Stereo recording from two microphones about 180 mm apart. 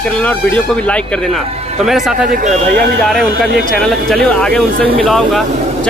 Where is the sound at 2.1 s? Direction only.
45° right (ahead or behind).